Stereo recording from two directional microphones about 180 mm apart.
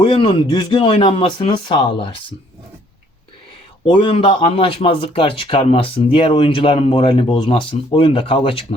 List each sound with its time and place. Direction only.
0.0 s speech: 30° left (ahead or behind)
3.9 s speech: 30° left (ahead or behind)